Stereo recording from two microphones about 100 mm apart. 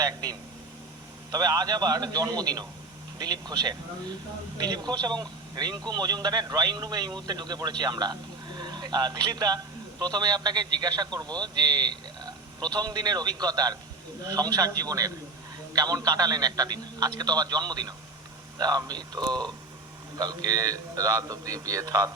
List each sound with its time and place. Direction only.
0.0 s a man's voice: 40° right (ahead or behind)